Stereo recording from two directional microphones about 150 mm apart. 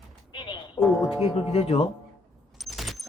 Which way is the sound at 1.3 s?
45° left (ahead or behind).